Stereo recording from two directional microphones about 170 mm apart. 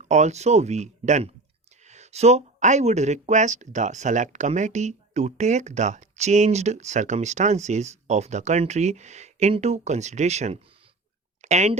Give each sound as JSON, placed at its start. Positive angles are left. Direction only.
{"t": 0.0, "sound": "speech", "side_deg": -45}